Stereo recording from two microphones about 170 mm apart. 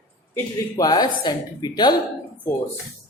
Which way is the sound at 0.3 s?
20° left (ahead or behind).